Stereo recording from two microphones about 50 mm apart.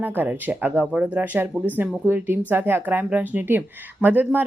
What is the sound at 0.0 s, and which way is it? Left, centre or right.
Speech, right.